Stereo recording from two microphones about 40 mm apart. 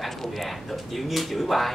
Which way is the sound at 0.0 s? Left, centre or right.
Centre.